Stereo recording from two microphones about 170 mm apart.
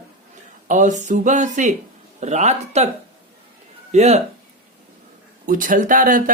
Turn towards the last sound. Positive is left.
turn(degrees=-55)  # may be behind; listen again after turning